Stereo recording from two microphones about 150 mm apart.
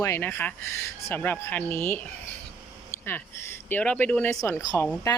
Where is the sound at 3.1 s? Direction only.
15° left (ahead or behind).